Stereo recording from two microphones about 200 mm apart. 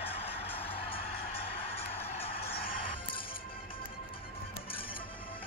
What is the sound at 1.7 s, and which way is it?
Music, 30° left (ahead or behind).